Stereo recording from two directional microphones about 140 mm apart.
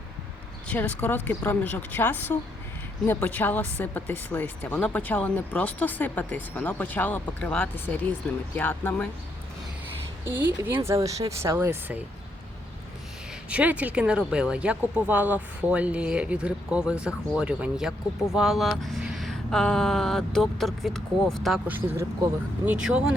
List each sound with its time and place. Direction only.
0.7 s speech: 10° left (ahead or behind)
10.8 s speech: 25° right (ahead or behind)
13.5 s speech: 10° right (ahead or behind)
21.7 s speech: 15° right (ahead or behind)